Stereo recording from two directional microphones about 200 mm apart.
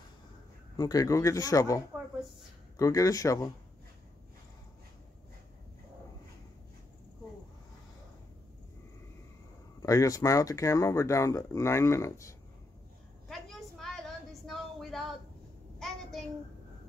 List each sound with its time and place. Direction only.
0.7 s speech: 20° left (ahead or behind)
2.8 s speech: 15° left (ahead or behind)
9.8 s speech: 15° left (ahead or behind)
13.3 s a sound: centre (ahead or behind)